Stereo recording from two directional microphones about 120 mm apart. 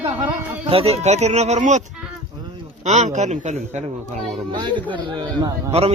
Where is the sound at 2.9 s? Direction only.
85° right.